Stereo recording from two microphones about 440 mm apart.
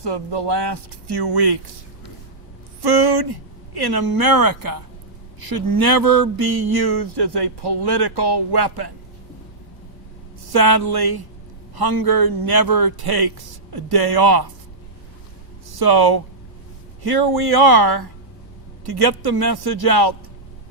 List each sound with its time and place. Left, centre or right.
0.0 s speech: right
2.8 s speech: right
10.4 s speech: right
15.7 s speech: right